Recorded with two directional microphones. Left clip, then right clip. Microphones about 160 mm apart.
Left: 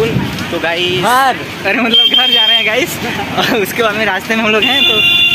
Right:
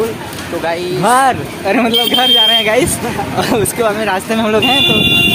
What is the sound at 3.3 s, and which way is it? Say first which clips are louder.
Speech: left 2 dB; 25° right (ahead or behind).